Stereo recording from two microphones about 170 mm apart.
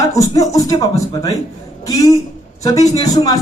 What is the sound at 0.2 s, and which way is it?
Speech, 20° left (ahead or behind).